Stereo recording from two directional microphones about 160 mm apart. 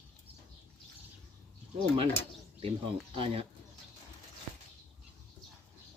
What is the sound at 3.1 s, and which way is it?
Speech, 35° right (ahead or behind).